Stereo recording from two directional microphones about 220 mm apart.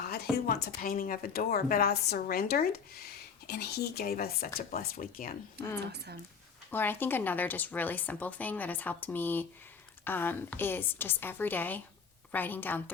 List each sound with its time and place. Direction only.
0.1 s a woman's voice: 45° left (ahead or behind)
5.8 s speech: 50° right (ahead or behind)
6.7 s speech: 10° left (ahead or behind)